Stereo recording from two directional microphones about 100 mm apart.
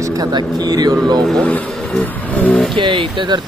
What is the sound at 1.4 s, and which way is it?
Speech, 15° left (ahead or behind).